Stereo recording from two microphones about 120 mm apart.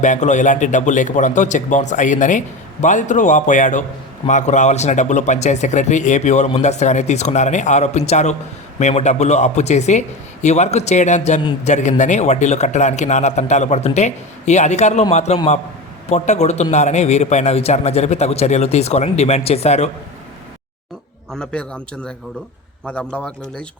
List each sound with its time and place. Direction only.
0.0 s a man's voice: 85° left; by 19.9 s 65° left (ahead or behind)
21.3 s a man's voice: 10° left (ahead or behind)